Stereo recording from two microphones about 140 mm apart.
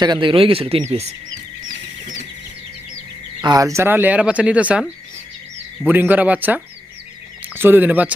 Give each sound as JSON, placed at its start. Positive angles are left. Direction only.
{"t": 0.0, "sound": "speech", "side_deg": -35}
{"t": 1.6, "sound": "bird", "side_deg": -70}
{"t": 3.4, "sound": "speech", "side_deg": -25}